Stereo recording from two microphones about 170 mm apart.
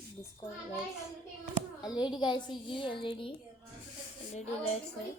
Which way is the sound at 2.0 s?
25° left (ahead or behind).